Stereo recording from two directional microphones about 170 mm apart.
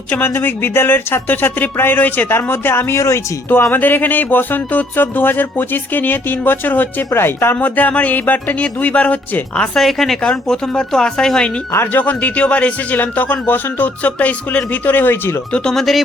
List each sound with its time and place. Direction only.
0.1 s speech: 10° left (ahead or behind)